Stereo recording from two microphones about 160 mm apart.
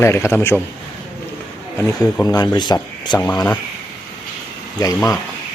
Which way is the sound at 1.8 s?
15° left (ahead or behind).